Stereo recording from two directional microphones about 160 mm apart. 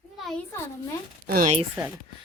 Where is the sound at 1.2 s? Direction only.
65° right (ahead or behind).